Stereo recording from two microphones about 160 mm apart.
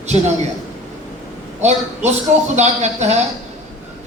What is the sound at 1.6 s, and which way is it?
A man's voice, 45° right (ahead or behind).